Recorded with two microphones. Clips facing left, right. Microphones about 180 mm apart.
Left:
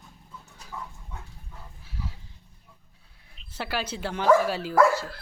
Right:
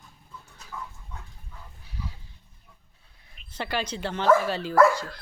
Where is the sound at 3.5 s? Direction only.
5° left (ahead or behind).